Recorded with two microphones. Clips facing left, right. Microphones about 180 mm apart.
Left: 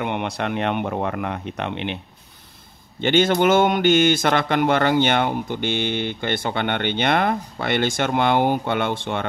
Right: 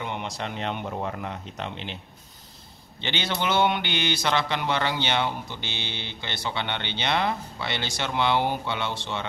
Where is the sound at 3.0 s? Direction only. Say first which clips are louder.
Left 12 dB; 50° left (ahead or behind).